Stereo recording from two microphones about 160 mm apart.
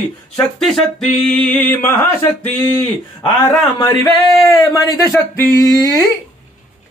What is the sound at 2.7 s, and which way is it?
Speech, 25° left (ahead or behind).